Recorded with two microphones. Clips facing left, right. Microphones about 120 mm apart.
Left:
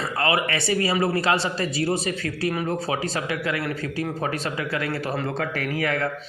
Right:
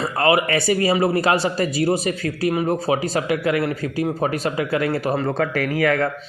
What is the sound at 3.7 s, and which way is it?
Speech, 40° right (ahead or behind).